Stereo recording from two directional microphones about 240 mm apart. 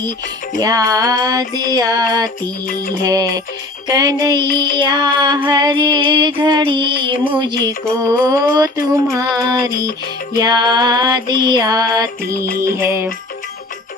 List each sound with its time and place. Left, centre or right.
0.6 s music: centre